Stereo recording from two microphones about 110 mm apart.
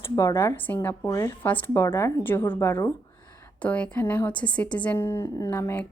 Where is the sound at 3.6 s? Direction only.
15° left (ahead or behind).